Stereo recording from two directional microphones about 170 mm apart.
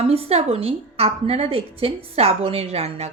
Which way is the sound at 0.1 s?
35° right (ahead or behind).